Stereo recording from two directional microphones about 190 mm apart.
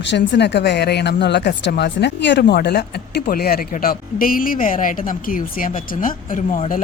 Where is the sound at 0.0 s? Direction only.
65° left (ahead or behind).